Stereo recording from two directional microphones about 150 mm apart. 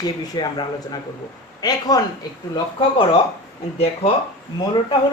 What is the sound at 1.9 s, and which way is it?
Speech, 25° left (ahead or behind).